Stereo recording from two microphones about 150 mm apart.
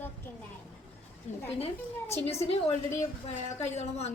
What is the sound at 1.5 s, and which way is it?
A woman's voice, 40° left (ahead or behind).